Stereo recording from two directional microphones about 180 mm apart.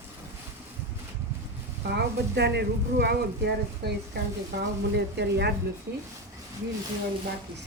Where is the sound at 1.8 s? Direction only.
65° right (ahead or behind).